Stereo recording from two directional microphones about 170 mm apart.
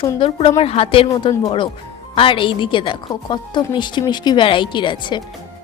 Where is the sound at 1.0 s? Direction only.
20° left (ahead or behind).